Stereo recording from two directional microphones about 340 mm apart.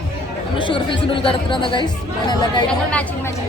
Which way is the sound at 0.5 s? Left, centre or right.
Centre.